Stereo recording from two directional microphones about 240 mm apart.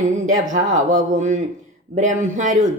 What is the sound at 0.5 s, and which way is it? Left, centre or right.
Speech, right.